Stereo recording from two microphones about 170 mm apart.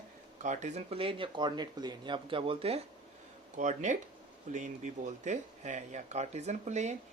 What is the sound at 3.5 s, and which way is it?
Speech, 45° right (ahead or behind).